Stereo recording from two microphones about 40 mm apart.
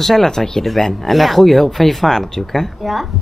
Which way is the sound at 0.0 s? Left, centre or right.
Centre.